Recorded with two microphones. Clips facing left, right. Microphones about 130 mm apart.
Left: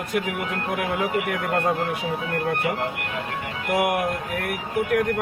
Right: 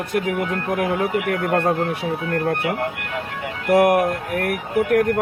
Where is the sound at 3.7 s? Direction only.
45° right (ahead or behind).